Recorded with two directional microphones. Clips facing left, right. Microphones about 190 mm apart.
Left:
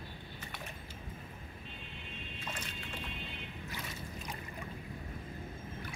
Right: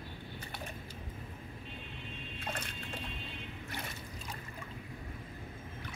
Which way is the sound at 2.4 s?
60° right (ahead or behind).